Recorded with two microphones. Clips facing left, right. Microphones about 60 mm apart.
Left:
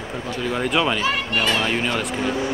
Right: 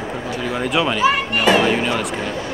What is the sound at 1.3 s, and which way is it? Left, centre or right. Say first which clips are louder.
Speech: right 6 dB; centre.